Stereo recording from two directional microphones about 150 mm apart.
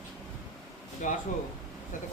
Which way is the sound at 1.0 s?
60° left (ahead or behind).